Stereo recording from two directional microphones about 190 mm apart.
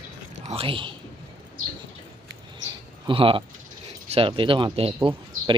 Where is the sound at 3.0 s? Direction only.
30° right (ahead or behind).